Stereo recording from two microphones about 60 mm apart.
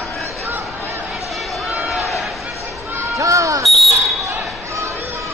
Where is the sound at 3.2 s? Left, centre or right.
Right.